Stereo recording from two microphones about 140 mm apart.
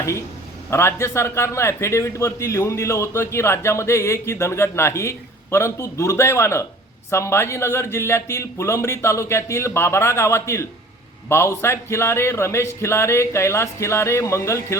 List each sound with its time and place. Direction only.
0.7 s a man's voice: 20° left (ahead or behind)